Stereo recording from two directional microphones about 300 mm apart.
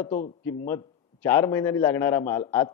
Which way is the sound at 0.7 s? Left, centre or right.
Centre.